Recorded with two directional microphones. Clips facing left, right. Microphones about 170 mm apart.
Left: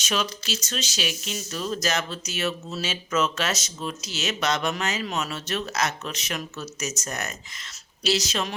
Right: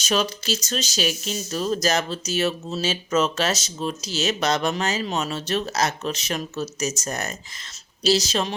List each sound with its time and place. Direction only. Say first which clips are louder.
0.0 s speech: right 5 dB; 40° right (ahead or behind)